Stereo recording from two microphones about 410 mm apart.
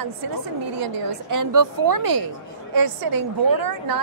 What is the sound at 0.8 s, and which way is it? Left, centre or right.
A woman's voice, right.